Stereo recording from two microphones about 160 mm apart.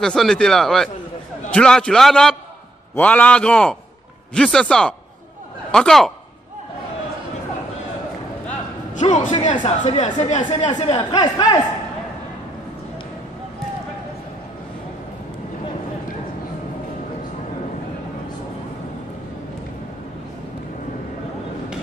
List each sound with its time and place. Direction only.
0.0 s a man's voice: 5° left (ahead or behind)
8.9 s a man's voice: 50° left (ahead or behind)
10.7 s a man's voice: 30° left (ahead or behind)